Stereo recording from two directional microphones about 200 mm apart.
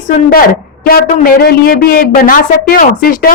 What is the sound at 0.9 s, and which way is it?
Speech, 50° left (ahead or behind).